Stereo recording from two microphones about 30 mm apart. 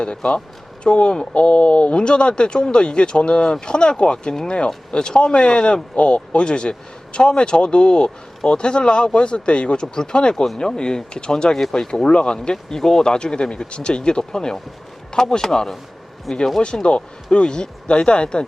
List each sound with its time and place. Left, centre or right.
0.0 s a man's voice: left; by 16.4 s centre
16.9 s speech: left
17.3 s speech: left